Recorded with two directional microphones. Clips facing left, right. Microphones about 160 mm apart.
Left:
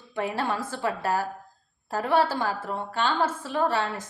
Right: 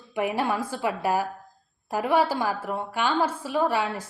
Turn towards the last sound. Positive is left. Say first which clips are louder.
# right 1 dB
turn(degrees=-10)  # may be behind; listen again after turning